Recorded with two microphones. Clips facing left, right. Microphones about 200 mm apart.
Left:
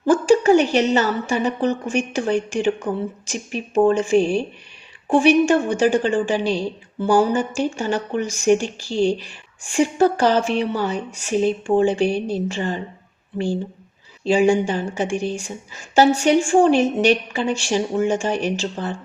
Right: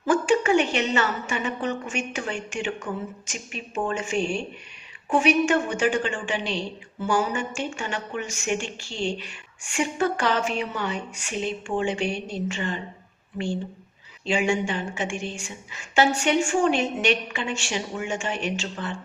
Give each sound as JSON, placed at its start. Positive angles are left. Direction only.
{"t": 0.0, "sound": "speech", "side_deg": 35}
{"t": 14.3, "sound": "speech", "side_deg": 35}